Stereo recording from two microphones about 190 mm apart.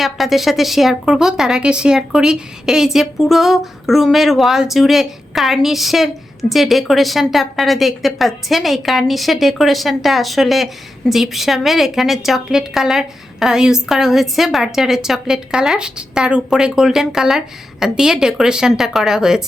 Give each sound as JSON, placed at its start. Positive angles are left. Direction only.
{"t": 0.0, "sound": "a woman's voice", "side_deg": 0}